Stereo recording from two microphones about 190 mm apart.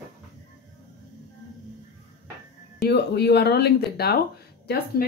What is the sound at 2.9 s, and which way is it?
Speech, 60° left (ahead or behind).